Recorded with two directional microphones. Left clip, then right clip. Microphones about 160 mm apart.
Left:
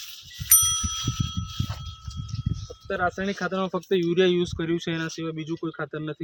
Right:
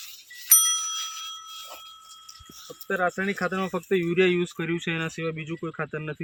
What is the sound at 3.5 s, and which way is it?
Speech, 60° left (ahead or behind).